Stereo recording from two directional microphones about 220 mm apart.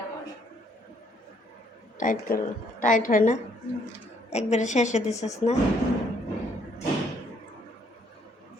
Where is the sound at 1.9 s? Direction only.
35° left (ahead or behind).